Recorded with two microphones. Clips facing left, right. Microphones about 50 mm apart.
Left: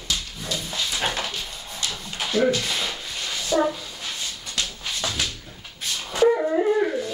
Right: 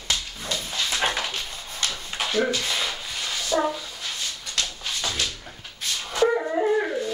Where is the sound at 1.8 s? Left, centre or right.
Right.